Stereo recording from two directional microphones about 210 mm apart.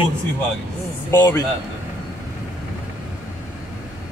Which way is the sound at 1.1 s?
15° left (ahead or behind).